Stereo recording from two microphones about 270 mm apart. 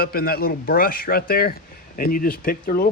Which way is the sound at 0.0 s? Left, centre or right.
Left.